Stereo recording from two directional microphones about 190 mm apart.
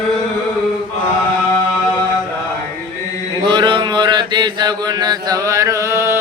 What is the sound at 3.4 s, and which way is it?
Mantra, 25° right (ahead or behind).